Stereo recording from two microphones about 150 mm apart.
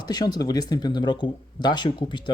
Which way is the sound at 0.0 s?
25° left (ahead or behind).